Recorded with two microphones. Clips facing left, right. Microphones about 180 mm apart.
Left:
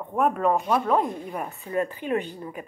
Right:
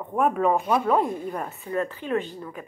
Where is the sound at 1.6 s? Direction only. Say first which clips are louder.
Left 3 dB; 15° left (ahead or behind).